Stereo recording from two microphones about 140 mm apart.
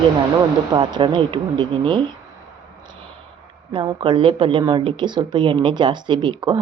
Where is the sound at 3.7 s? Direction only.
35° right (ahead or behind).